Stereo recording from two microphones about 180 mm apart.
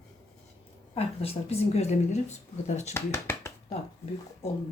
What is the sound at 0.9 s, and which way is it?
A woman's voice, 35° left (ahead or behind).